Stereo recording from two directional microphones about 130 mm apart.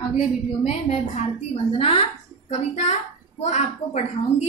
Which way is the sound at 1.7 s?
45° left (ahead or behind).